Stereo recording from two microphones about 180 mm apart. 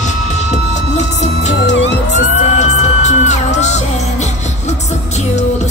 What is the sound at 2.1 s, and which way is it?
Music, 40° left (ahead or behind).